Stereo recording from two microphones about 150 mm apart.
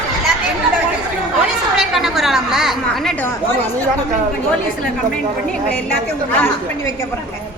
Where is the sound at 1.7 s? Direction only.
Centre (ahead or behind).